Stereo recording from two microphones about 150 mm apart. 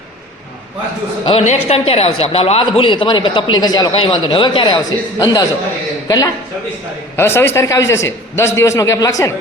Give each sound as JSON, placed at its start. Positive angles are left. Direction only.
{"t": 1.3, "sound": "a man's voice", "side_deg": 45}